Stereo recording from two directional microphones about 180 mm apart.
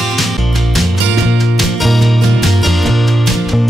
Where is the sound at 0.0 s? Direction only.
Centre (ahead or behind).